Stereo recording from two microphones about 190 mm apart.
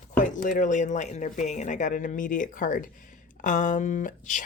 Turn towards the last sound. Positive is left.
turn(degrees=45)  # may be behind; listen again after turning